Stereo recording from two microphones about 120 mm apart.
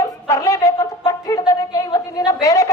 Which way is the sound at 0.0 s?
25° left (ahead or behind).